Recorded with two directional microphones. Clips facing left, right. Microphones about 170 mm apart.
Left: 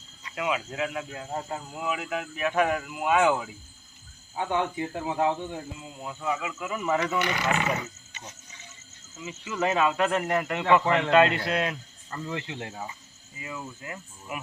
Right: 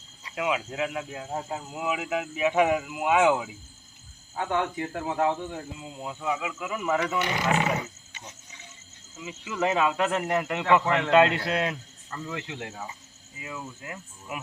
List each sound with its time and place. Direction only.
0.3 s speech: 5° right (ahead or behind)
4.4 s speech: centre (ahead or behind)
5.8 s speech: 15° right (ahead or behind)
9.1 s speech: 10° right (ahead or behind)
10.8 s a man's voice: 10° left (ahead or behind)
11.1 s a man's voice: 20° right (ahead or behind)
12.1 s speech: centre (ahead or behind)